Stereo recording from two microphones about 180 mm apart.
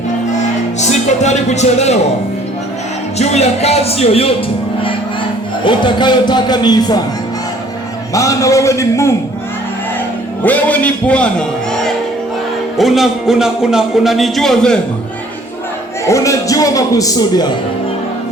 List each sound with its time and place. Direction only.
0.8 s speech: 40° left (ahead or behind)
3.2 s speech: 35° left (ahead or behind)
5.6 s speech: 25° left (ahead or behind)
8.1 s a man's voice: 20° left (ahead or behind)
10.4 s a man's voice: 10° left (ahead or behind)
16.0 s speech: 15° left (ahead or behind)